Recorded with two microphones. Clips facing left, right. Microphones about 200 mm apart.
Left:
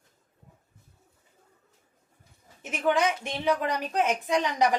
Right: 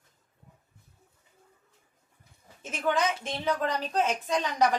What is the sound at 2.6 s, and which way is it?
A woman's voice, 15° left (ahead or behind).